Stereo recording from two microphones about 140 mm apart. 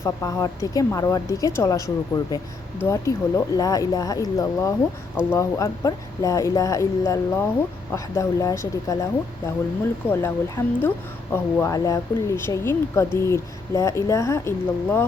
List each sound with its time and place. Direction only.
0.0 s speech: 20° left (ahead or behind)
10.1 s speech: 15° left (ahead or behind)